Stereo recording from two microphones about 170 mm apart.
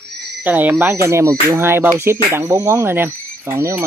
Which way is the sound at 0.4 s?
10° right (ahead or behind).